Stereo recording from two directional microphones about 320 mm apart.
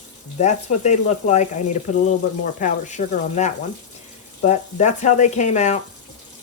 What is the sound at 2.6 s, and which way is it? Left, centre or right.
Speech, left.